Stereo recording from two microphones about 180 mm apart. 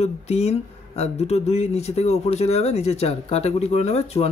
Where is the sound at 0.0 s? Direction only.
35° left (ahead or behind).